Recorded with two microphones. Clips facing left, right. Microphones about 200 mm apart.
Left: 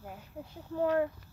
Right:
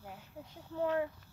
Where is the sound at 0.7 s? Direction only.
55° left (ahead or behind).